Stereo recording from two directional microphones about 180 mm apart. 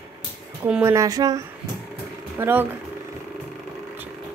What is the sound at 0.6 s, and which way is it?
Speech, 10° right (ahead or behind).